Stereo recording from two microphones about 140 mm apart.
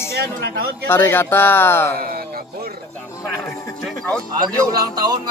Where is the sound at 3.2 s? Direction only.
20° left (ahead or behind).